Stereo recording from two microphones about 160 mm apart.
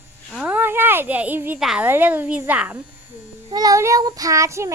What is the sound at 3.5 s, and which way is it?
Child singing, 25° right (ahead or behind).